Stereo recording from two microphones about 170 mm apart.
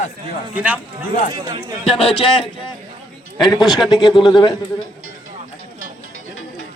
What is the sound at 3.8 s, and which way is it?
Speech, 25° left (ahead or behind).